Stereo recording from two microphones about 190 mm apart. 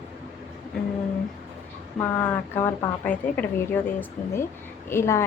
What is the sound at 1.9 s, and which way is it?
A woman's voice, 10° left (ahead or behind).